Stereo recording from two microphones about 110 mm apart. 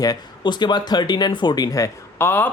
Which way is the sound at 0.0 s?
40° left (ahead or behind).